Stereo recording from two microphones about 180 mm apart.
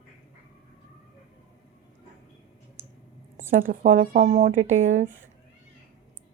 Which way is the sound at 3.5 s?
45° right (ahead or behind).